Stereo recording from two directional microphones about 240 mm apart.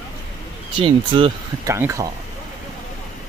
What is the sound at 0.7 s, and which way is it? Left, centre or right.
Speech, right.